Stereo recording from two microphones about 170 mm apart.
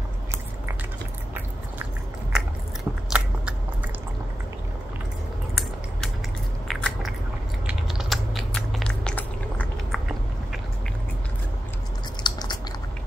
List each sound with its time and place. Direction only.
2.3 s biting: 5° right (ahead or behind)
6.7 s biting: centre (ahead or behind)
12.2 s chewing: 25° left (ahead or behind)